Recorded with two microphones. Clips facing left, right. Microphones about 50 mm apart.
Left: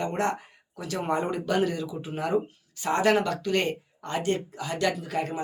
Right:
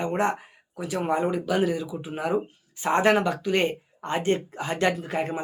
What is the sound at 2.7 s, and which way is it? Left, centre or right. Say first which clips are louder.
Speech: right 2 dB; right.